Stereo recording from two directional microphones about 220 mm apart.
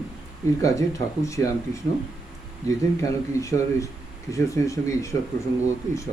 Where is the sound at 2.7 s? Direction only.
15° left (ahead or behind).